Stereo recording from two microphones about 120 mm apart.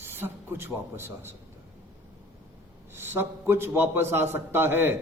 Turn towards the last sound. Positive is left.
turn(degrees=-20)  # may be behind; listen again after turning